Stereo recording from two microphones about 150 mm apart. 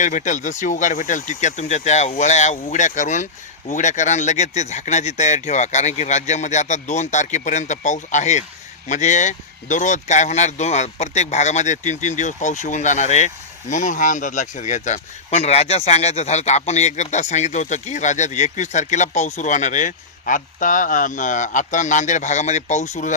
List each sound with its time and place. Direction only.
0.0 s speech: 55° left (ahead or behind)